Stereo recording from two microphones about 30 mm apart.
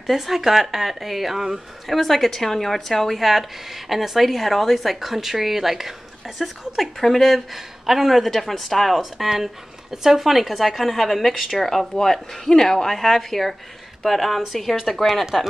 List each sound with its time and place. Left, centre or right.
0.1 s speech: centre
7.5 s speech: centre
8.2 s speech: centre
9.4 s speech: centre
11.6 s a woman's voice: centre